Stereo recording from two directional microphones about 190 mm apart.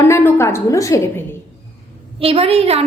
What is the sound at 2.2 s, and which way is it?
Speech, 30° right (ahead or behind).